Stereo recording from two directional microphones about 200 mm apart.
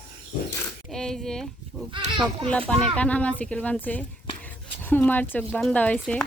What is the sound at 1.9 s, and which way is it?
Speech, 25° right (ahead or behind).